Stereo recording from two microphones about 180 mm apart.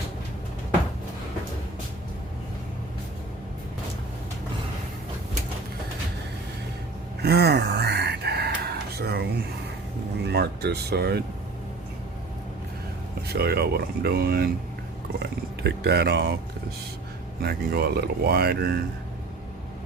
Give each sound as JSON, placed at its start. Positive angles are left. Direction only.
{"t": 7.2, "sound": "a sound", "side_deg": -65}
{"t": 10.2, "sound": "speech", "side_deg": -65}
{"t": 13.3, "sound": "speech", "side_deg": -60}
{"t": 17.4, "sound": "speech", "side_deg": -60}